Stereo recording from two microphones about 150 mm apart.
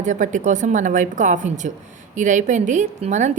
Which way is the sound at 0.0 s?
55° right (ahead or behind).